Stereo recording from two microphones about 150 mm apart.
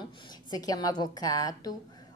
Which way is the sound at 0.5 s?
25° left (ahead or behind).